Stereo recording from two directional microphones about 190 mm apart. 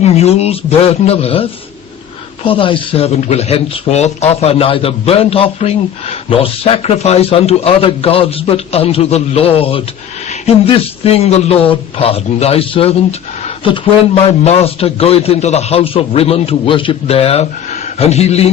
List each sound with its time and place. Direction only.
0.0 s speech: 35° left (ahead or behind)
14.2 s speech: 30° left (ahead or behind)